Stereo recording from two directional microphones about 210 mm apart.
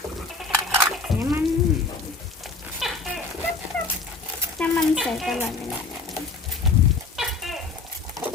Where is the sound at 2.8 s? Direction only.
Centre (ahead or behind).